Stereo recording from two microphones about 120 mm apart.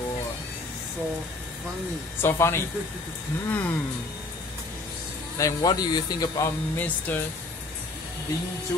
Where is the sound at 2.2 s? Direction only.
20° left (ahead or behind).